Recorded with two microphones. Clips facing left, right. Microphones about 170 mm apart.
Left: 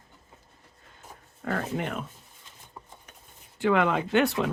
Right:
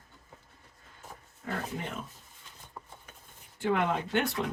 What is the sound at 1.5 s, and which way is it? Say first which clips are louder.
Speech: left 6 dB; 75° left (ahead or behind).